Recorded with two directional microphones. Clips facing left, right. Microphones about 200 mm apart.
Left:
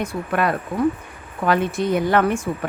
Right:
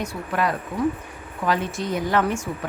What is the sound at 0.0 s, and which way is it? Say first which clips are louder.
Speech: left 3 dB; 55° left (ahead or behind).